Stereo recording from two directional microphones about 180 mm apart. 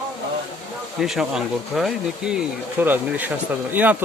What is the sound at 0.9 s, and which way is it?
A man's voice, centre (ahead or behind).